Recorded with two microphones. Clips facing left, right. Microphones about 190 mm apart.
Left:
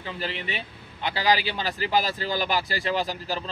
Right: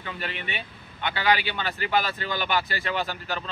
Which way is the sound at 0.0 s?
30° left (ahead or behind).